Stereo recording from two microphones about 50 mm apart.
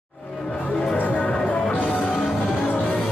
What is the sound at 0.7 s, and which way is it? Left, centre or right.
Music, centre.